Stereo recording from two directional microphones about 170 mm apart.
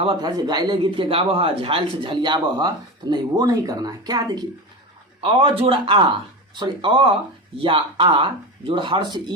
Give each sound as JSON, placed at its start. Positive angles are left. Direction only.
{"t": 0.0, "sound": "speech", "side_deg": -25}